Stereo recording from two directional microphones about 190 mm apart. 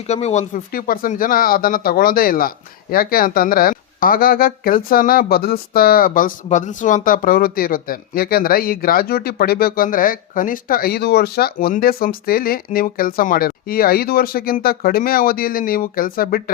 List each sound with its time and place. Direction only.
0.1 s speech: 35° left (ahead or behind)